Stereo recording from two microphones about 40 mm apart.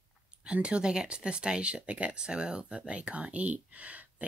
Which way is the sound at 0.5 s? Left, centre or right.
Right.